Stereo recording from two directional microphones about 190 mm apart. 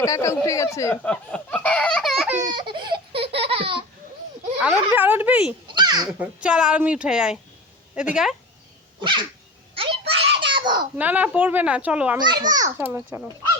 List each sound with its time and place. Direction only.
0.0 s speech: 15° left (ahead or behind); by 2.4 s 5° right (ahead or behind)
2.4 s a sound: 25° right (ahead or behind)
4.6 s a child's voice: 10° right (ahead or behind)
5.6 s a sound: 25° right (ahead or behind)
6.1 s a woman's voice: 5° right (ahead or behind)
9.0 s dog: 25° right (ahead or behind)
9.7 s a sound: 30° right (ahead or behind)
10.4 s babbling: 25° right (ahead or behind)
10.9 s a child's voice: 10° right (ahead or behind)
12.2 s a child's voice: 25° right (ahead or behind)
12.8 s a child's voice: 10° right (ahead or behind)